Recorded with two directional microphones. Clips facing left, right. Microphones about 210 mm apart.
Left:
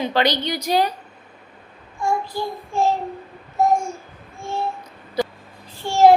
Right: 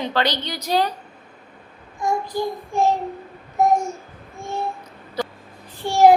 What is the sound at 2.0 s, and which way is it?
Speech, 15° right (ahead or behind).